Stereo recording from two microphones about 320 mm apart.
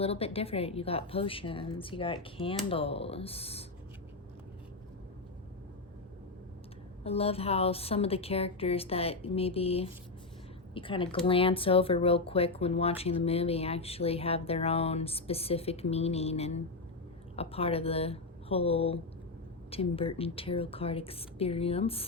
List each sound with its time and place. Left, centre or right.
0.0 s a woman's voice: centre
7.0 s a woman's voice: centre